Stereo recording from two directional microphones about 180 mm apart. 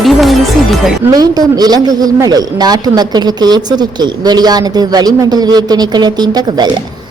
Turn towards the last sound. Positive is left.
turn(degrees=-25)  # may be behind; listen again after turning